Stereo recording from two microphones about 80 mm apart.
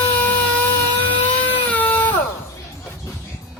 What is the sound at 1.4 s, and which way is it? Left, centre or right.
Baby cry, left.